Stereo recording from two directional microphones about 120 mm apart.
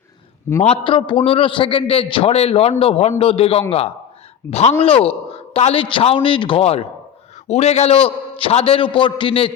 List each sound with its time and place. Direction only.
0.5 s speech: 25° left (ahead or behind)
0.9 s a man's voice: 45° left (ahead or behind)
4.4 s speech: 20° left (ahead or behind)
5.0 s a man's voice: 55° left (ahead or behind)
7.4 s a man's voice: 65° left (ahead or behind); by 9.5 s 45° left (ahead or behind)